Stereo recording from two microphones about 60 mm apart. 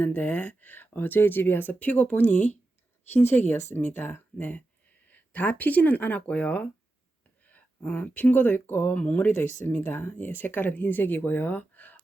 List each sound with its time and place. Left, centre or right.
0.0 s speech: left
3.1 s speech: left